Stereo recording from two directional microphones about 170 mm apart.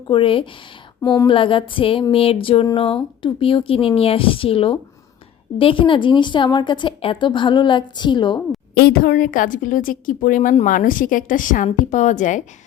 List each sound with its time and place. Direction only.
0.1 s a woman's voice: 30° left (ahead or behind)
1.0 s speech: 20° left (ahead or behind)
1.3 s a woman's voice: 30° left (ahead or behind)
8.7 s a woman's voice: 60° left (ahead or behind); by 12.4 s 45° left (ahead or behind)